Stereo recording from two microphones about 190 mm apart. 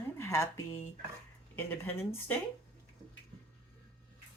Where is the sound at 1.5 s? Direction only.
10° left (ahead or behind).